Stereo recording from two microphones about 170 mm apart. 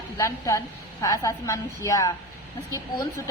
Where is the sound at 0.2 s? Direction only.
20° left (ahead or behind).